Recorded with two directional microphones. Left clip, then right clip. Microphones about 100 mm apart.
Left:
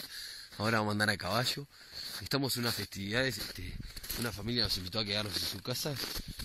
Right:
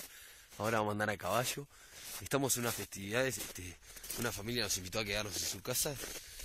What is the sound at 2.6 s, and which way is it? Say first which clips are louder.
Speech: left 3 dB; 30° right (ahead or behind).